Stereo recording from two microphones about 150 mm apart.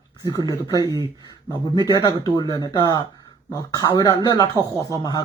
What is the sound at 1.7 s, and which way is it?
Speech, 25° left (ahead or behind).